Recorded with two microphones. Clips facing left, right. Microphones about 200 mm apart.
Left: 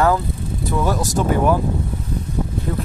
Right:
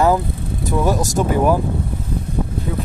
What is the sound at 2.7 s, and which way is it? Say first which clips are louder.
Speech: left 1 dB; 5° right (ahead or behind).